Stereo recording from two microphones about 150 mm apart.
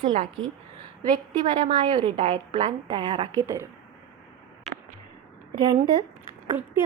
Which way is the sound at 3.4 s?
15° right (ahead or behind).